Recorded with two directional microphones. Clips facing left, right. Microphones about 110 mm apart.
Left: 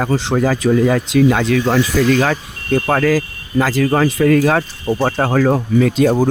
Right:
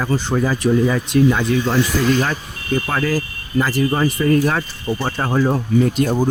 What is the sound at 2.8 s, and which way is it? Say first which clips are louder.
Speech: left 5 dB; 55° left (ahead or behind).